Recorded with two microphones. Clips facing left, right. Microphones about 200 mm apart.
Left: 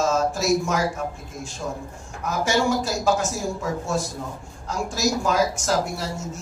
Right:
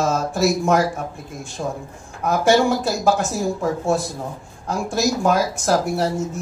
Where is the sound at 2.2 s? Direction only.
60° right (ahead or behind).